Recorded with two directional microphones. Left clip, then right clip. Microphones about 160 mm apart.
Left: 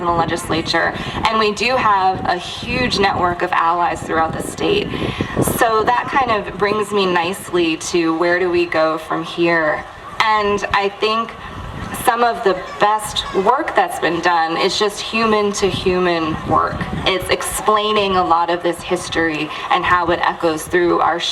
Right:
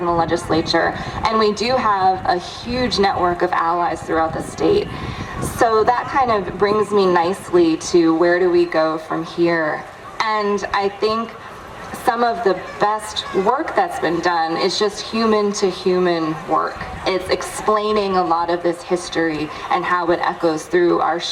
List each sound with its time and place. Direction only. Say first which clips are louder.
0.0 s speech: left 1 dB; 20° left (ahead or behind)
4.7 s speech: left 2 dB; 55° left (ahead or behind)
5.4 s speech: even; 25° left (ahead or behind)